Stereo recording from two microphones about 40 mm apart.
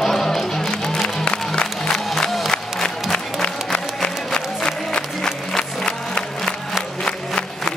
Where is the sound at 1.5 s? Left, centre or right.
Centre.